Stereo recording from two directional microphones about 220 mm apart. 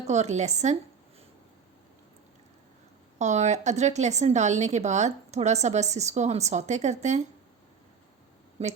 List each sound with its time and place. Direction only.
0.0 s a woman's voice: 30° right (ahead or behind)
3.2 s a woman's voice: 30° right (ahead or behind)
8.6 s speech: 30° right (ahead or behind)